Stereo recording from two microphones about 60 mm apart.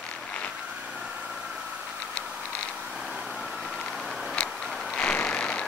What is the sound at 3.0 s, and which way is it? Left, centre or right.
Vehicle, centre.